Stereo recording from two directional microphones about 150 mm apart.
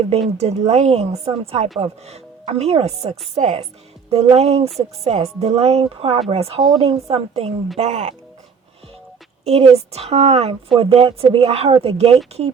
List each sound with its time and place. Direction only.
0.3 s a woman's voice: 45° right (ahead or behind)
9.4 s speech: 40° right (ahead or behind)